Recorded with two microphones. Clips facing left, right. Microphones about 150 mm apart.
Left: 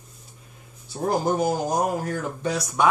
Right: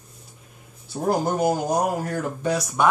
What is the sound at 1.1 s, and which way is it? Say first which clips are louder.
Speech: right 1 dB; 5° right (ahead or behind).